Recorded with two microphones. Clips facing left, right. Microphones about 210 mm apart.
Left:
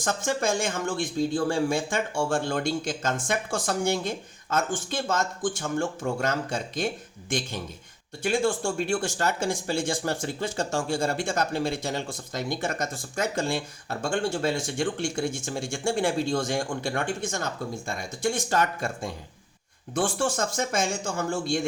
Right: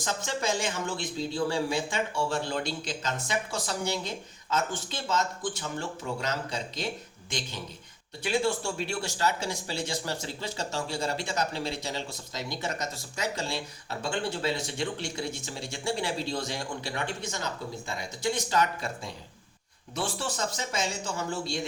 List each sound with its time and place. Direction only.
0.0 s a man's voice: 50° left (ahead or behind)